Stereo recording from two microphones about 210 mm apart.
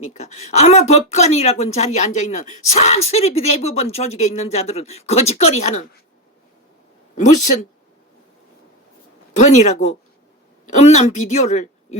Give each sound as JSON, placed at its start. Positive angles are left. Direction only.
{"t": 0.1, "sound": "speech", "side_deg": 35}
{"t": 7.2, "sound": "speech", "side_deg": 35}
{"t": 9.3, "sound": "speech", "side_deg": 35}